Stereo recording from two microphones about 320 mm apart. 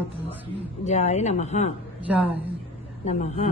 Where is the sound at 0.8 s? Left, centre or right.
Left.